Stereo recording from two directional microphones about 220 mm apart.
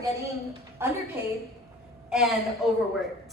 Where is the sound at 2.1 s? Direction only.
Centre (ahead or behind).